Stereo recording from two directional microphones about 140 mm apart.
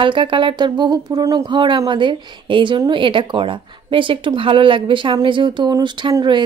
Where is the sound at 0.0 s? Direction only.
35° right (ahead or behind).